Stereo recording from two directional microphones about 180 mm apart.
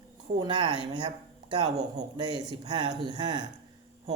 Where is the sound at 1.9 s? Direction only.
25° right (ahead or behind).